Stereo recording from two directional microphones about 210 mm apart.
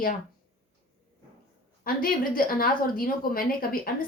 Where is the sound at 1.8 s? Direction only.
40° left (ahead or behind).